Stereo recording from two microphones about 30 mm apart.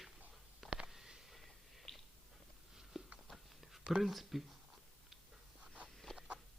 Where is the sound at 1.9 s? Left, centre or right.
Left.